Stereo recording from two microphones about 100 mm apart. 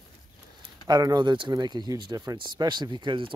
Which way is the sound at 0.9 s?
40° right (ahead or behind).